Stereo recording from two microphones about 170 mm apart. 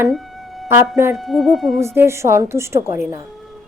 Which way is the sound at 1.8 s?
15° right (ahead or behind).